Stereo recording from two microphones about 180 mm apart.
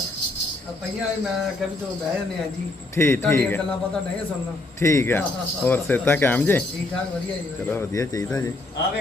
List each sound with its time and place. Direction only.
2.9 s speech: 15° left (ahead or behind)
4.8 s speech: 15° left (ahead or behind)
7.7 s speech: 15° left (ahead or behind)